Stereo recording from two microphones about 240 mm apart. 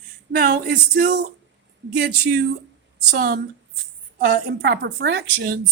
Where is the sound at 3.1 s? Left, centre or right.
Right.